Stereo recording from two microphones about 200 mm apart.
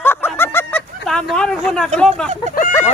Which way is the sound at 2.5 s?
45° left (ahead or behind).